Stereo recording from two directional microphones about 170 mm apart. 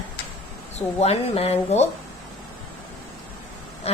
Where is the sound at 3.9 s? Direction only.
35° left (ahead or behind).